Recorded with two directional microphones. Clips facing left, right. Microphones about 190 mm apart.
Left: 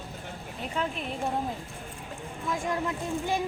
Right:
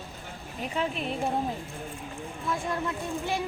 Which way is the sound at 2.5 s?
20° left (ahead or behind).